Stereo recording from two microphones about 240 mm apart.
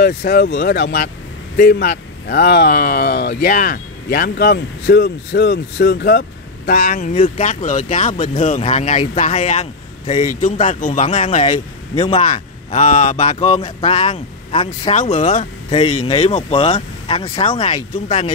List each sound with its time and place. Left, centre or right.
0.0 s speech: left
11.1 s speech: left
12.2 s speech: left